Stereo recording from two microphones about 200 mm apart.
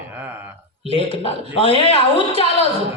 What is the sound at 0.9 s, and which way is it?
Speech, 25° left (ahead or behind).